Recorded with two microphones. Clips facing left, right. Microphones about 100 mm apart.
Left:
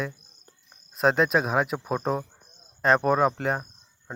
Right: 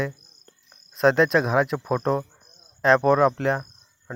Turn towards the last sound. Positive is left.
turn(degrees=0)  # may be behind; listen again after turning